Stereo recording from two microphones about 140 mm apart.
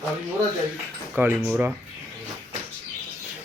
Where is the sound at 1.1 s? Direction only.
15° right (ahead or behind).